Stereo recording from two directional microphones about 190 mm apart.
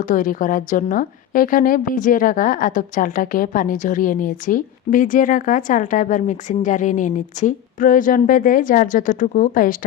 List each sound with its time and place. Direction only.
0.0 s a woman's voice: 45° left (ahead or behind)